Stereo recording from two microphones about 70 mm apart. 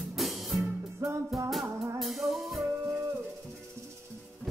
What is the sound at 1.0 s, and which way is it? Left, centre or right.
Music, right.